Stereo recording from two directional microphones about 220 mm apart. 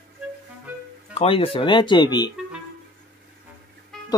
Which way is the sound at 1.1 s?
25° left (ahead or behind).